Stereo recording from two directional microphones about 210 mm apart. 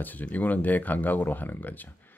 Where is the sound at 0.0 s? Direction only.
10° left (ahead or behind).